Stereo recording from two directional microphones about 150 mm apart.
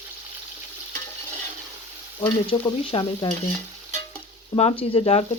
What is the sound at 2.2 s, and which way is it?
Stir, 35° left (ahead or behind).